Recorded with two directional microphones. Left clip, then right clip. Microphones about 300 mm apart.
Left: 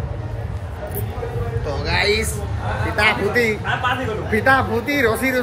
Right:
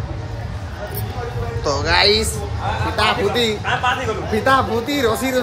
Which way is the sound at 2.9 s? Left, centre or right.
Centre.